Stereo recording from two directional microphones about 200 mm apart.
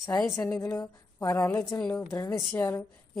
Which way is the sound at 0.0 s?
15° left (ahead or behind).